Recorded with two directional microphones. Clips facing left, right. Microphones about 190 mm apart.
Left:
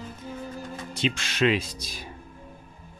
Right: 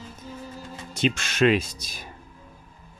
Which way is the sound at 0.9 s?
45° right (ahead or behind).